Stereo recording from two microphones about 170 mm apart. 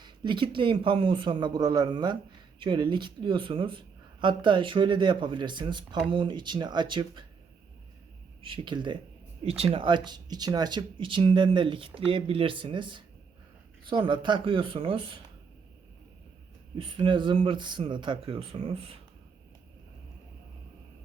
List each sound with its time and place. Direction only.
0.0 s speech: 25° right (ahead or behind)
8.4 s speech: 30° right (ahead or behind)
16.7 s speech: 30° right (ahead or behind)